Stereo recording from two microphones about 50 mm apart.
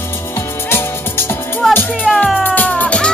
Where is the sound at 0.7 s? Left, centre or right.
Left.